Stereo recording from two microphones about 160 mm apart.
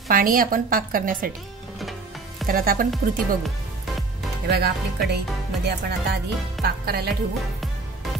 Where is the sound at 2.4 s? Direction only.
65° right (ahead or behind).